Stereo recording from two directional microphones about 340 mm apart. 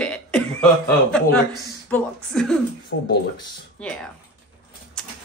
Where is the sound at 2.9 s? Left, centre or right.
Left.